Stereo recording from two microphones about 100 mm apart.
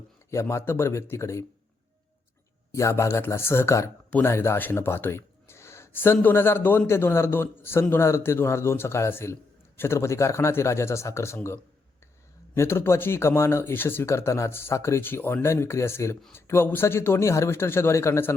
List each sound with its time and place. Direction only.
0.3 s a man's voice: 30° left (ahead or behind)
2.7 s a man's voice: 30° left (ahead or behind)
12.5 s a man's voice: 25° left (ahead or behind)